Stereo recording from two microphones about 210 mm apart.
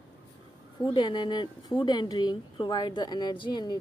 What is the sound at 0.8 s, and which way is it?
Speech, 20° left (ahead or behind).